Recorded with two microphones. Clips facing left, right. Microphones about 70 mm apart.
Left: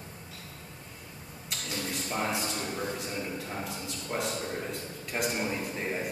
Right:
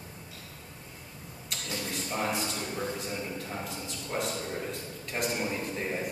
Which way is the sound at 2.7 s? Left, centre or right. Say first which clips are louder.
Even; centre.